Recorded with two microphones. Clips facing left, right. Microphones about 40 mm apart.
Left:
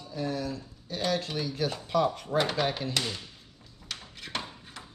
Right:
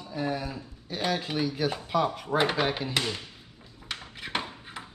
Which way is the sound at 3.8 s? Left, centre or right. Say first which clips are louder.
Right 4 dB; right.